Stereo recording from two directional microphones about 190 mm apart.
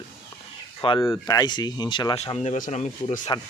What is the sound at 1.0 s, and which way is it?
Speech, 15° left (ahead or behind).